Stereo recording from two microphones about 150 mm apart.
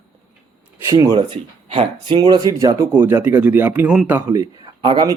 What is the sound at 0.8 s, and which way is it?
A man's voice, 20° right (ahead or behind).